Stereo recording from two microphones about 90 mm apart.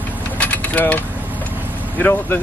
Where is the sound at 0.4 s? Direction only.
20° left (ahead or behind).